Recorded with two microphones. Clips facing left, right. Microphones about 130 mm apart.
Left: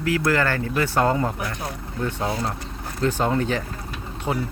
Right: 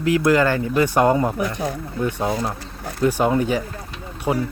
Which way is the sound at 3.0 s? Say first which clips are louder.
Right 4 dB; 10° right (ahead or behind).